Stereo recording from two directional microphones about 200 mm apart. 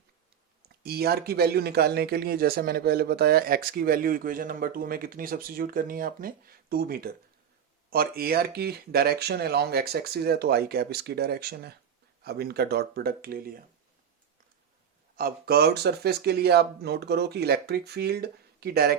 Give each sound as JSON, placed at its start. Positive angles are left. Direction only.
{"t": 0.8, "sound": "speech", "side_deg": -50}
{"t": 15.1, "sound": "speech", "side_deg": -50}